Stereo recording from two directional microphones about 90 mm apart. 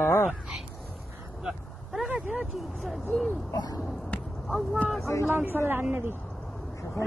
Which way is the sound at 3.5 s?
45° left (ahead or behind).